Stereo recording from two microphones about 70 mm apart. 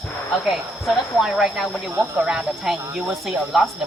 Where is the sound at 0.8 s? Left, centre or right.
Centre.